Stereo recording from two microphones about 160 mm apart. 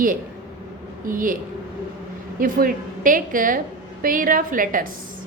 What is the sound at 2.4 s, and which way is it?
A woman's voice, 60° right (ahead or behind).